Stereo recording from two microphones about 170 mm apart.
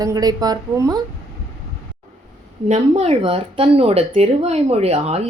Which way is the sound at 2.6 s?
40° right (ahead or behind).